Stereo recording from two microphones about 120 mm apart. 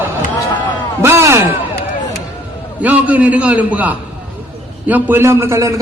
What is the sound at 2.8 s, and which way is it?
A man's voice, 15° right (ahead or behind).